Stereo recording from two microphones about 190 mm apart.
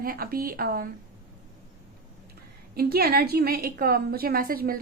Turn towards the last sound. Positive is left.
turn(degrees=-50)  # may be behind; listen again after turning